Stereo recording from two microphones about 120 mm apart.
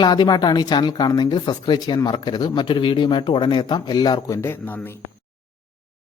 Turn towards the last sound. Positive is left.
turn(degrees=20)  # may be behind; listen again after turning